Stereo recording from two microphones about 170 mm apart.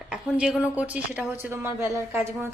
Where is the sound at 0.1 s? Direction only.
5° right (ahead or behind).